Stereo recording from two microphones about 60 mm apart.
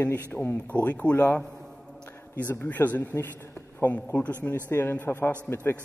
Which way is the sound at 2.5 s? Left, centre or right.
Left.